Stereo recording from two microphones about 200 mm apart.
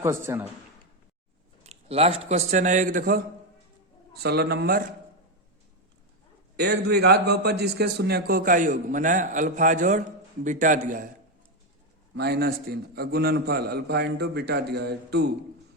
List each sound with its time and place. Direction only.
0.0 s a man's voice: 15° right (ahead or behind)
1.6 s a man's voice: 30° right (ahead or behind)
4.1 s a man's voice: 55° right (ahead or behind)
6.6 s a man's voice: 55° right (ahead or behind)
12.1 s a man's voice: 55° right (ahead or behind)